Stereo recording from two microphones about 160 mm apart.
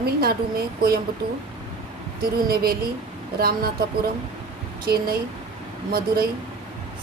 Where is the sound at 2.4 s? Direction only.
70° right (ahead or behind).